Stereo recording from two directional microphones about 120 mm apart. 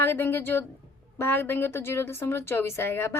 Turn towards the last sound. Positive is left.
turn(degrees=20)  # may be behind; listen again after turning